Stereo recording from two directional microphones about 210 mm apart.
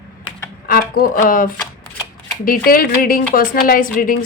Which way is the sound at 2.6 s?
45° left (ahead or behind).